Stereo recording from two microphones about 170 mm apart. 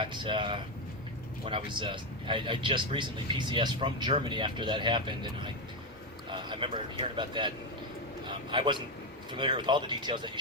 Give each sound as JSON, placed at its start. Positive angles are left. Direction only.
{"t": 0.0, "sound": "speech", "side_deg": -30}